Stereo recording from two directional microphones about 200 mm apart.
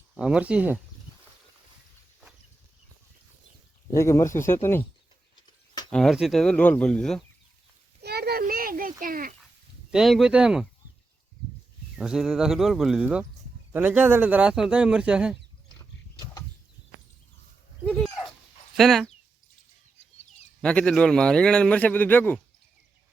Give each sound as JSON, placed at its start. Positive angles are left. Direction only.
{"t": 0.1, "sound": "a man's voice", "side_deg": -5}
{"t": 3.9, "sound": "speech", "side_deg": 15}
{"t": 5.9, "sound": "a man's voice", "side_deg": 0}
{"t": 8.0, "sound": "a sound", "side_deg": -50}
{"t": 9.9, "sound": "a man's voice", "side_deg": 0}
{"t": 11.9, "sound": "a man's voice", "side_deg": -5}
{"t": 15.8, "sound": "mechanisms", "side_deg": 15}
{"t": 17.8, "sound": "dog", "side_deg": 0}
{"t": 18.8, "sound": "a man's voice", "side_deg": 0}
{"t": 20.6, "sound": "a man's voice", "side_deg": 5}